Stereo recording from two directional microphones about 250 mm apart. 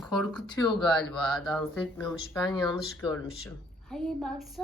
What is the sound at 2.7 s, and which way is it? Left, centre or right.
Speech, centre.